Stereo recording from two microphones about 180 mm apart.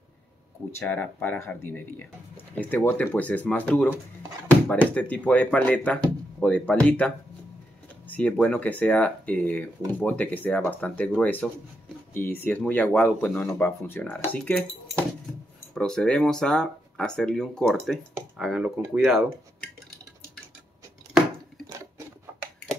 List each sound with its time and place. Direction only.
0.7 s speech: 10° left (ahead or behind)
4.9 s speech: 10° left (ahead or behind)
8.1 s speech: 10° left (ahead or behind)
15.7 s speech: 5° left (ahead or behind)